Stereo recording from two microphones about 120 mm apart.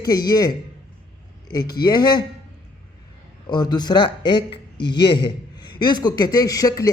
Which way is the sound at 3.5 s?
35° left (ahead or behind).